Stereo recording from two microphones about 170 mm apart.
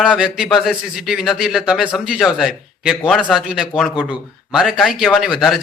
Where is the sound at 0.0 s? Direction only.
5° right (ahead or behind).